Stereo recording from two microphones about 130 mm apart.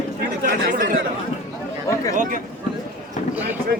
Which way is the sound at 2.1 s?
90° right.